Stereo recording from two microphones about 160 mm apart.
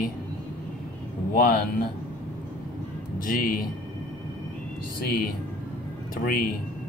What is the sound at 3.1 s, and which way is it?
Speech, 60° left (ahead or behind).